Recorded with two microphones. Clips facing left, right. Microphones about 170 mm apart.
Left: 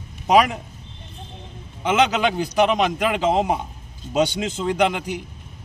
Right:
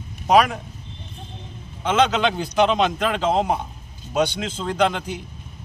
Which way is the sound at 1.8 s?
15° left (ahead or behind).